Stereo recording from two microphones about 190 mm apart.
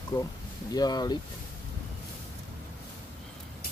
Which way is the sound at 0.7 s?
20° left (ahead or behind).